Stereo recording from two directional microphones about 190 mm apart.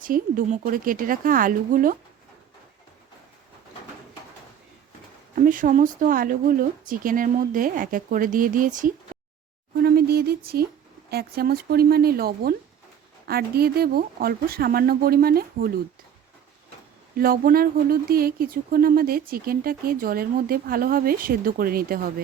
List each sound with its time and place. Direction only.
0.0 s speech: 45° right (ahead or behind)
5.3 s speech: 45° right (ahead or behind)
9.1 s a sound: 45° right (ahead or behind)
11.1 s speech: 55° right (ahead or behind)
17.2 s speech: 50° right (ahead or behind)